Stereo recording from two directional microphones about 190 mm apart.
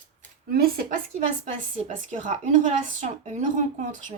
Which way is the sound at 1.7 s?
40° right (ahead or behind).